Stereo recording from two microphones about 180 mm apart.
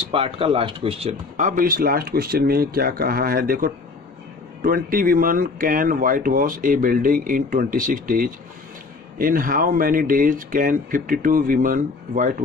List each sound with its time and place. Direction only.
0.0 s speech: 30° right (ahead or behind); by 12.4 s 50° right (ahead or behind)